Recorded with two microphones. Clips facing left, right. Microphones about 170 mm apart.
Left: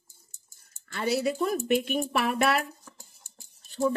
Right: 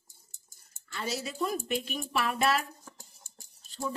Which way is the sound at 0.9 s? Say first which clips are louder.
Left 9 dB; 65° left (ahead or behind).